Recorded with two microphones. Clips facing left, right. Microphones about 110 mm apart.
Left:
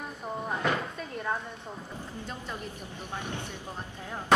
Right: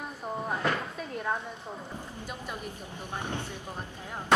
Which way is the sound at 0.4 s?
Centre (ahead or behind).